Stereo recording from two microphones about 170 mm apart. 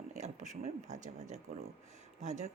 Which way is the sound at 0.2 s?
45° right (ahead or behind).